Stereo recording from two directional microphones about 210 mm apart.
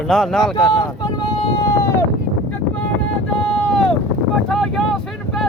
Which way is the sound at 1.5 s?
15° left (ahead or behind).